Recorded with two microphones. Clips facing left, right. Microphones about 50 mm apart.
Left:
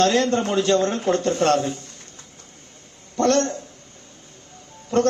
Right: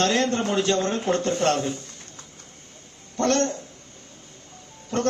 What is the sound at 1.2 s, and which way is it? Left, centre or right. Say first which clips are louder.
Speech: left 4 dB; left.